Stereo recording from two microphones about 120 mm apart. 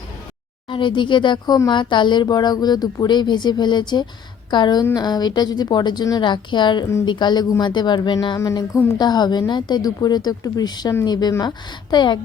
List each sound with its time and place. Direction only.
0.7 s a woman's voice: 40° left (ahead or behind)